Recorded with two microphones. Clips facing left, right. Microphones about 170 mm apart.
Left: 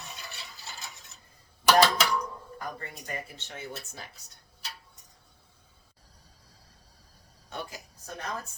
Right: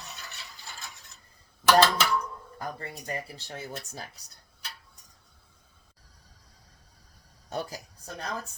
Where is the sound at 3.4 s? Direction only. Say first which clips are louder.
Right 2 dB; 35° right (ahead or behind).